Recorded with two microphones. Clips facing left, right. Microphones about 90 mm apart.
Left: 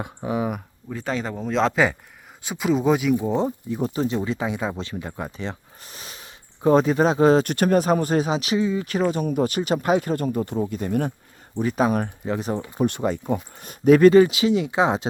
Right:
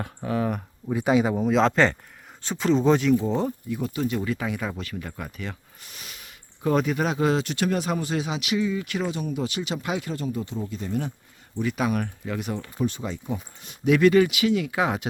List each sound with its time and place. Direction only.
0.0 s speech: 15° left (ahead or behind)
0.9 s speech: 10° right (ahead or behind); by 3.2 s 5° left (ahead or behind)
3.2 s speech: 20° left (ahead or behind)
3.7 s speech: 35° left (ahead or behind)
7.4 s speech: 45° left (ahead or behind)
11.5 s speech: 35° left (ahead or behind)
12.8 s speech: 55° left (ahead or behind); by 15.0 s 25° left (ahead or behind)